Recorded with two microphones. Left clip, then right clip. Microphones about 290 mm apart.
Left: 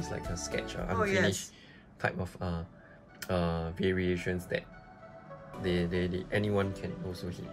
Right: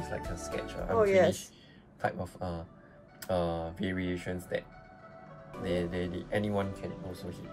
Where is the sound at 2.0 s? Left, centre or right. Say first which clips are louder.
Even; left.